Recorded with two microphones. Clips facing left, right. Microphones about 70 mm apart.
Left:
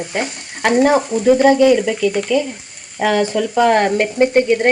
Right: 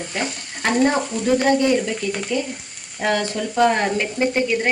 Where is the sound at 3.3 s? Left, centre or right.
Left.